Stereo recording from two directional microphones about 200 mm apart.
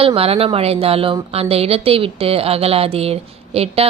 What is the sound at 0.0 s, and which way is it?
A woman's voice, 30° right (ahead or behind).